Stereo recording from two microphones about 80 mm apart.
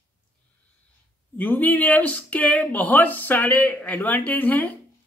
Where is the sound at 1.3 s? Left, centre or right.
Left.